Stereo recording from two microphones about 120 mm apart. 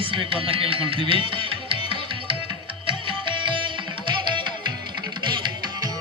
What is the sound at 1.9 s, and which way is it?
Music, 45° right (ahead or behind).